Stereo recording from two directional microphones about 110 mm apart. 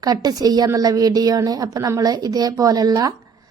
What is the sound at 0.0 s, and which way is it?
Speech, 35° right (ahead or behind).